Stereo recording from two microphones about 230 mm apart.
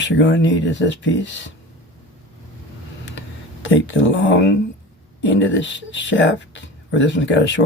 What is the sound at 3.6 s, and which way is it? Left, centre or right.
Speech, left.